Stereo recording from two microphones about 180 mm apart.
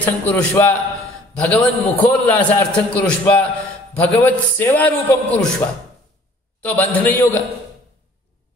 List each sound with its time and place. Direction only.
0.0 s a man's voice: 10° left (ahead or behind)
6.6 s a man's voice: 10° left (ahead or behind)